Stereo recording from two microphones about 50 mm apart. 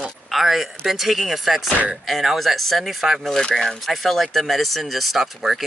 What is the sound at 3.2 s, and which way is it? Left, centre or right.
Speech, centre.